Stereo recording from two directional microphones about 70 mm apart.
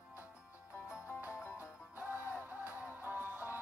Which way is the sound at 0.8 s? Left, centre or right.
Left.